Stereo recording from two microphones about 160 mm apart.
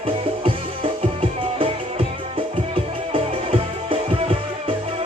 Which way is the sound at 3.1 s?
35° right (ahead or behind).